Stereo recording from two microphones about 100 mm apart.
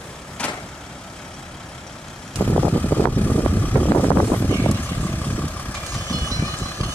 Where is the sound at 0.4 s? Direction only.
10° left (ahead or behind).